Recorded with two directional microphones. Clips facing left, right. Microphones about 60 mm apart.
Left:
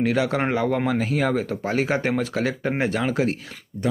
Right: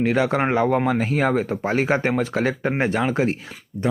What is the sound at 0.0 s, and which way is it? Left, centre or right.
A man's voice, right.